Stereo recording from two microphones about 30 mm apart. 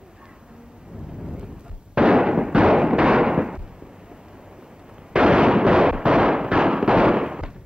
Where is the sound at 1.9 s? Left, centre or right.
Right.